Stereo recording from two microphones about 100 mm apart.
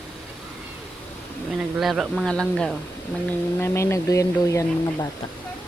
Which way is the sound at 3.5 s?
25° left (ahead or behind).